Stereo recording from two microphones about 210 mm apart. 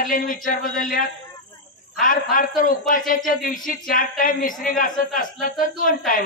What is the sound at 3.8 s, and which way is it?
A man's voice, 40° left (ahead or behind).